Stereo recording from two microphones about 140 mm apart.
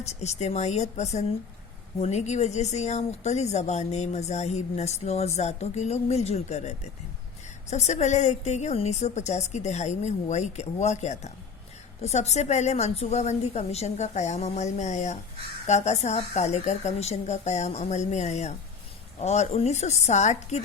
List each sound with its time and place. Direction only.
0.0 s a woman's voice: 55° left (ahead or behind)